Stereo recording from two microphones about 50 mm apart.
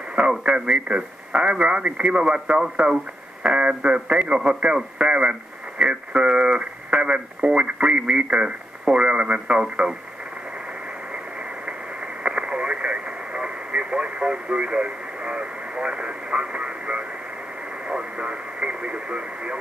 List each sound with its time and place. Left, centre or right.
0.4 s speech: centre
11.6 s radio: right
17.8 s speech: centre